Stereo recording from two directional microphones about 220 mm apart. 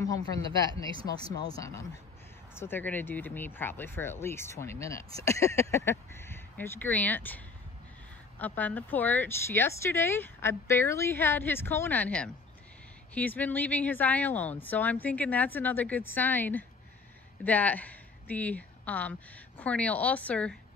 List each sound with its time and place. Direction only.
0.0 s a woman's voice: 15° left (ahead or behind)